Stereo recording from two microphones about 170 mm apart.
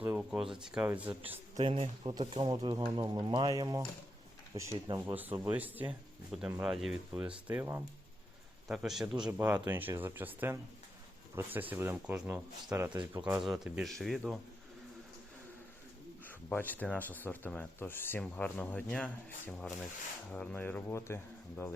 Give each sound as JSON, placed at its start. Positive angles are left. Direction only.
{"t": 0.0, "sound": "speech", "side_deg": -10}
{"t": 1.6, "sound": "speech", "side_deg": -30}
{"t": 4.9, "sound": "speech", "side_deg": -10}
{"t": 16.2, "sound": "speech", "side_deg": 10}